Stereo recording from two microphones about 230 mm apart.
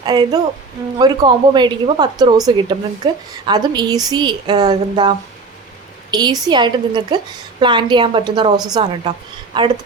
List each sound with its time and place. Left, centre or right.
0.0 s a woman's voice: centre